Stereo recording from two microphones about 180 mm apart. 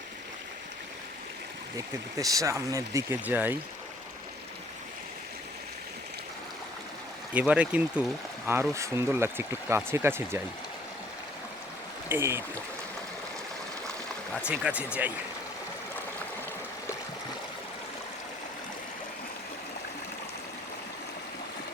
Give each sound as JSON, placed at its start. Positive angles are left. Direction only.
{"t": 1.7, "sound": "speech", "side_deg": -20}
{"t": 7.3, "sound": "speech", "side_deg": -5}
{"t": 12.0, "sound": "speech", "side_deg": -15}
{"t": 14.4, "sound": "speech", "side_deg": -5}